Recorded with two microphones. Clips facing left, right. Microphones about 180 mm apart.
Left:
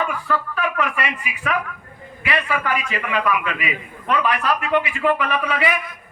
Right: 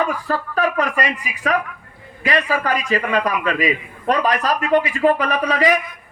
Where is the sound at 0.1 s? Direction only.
40° right (ahead or behind).